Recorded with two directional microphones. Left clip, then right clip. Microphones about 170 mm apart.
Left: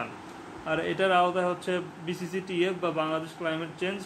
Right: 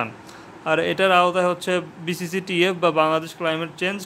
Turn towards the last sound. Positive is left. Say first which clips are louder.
# right 7 dB
turn(degrees=-50)  # may be behind; listen again after turning